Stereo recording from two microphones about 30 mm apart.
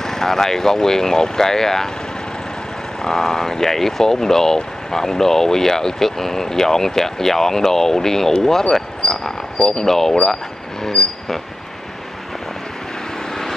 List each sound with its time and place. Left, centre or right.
0.0 s speech: centre
3.0 s speech: centre
9.0 s cricket: centre
9.7 s speech: centre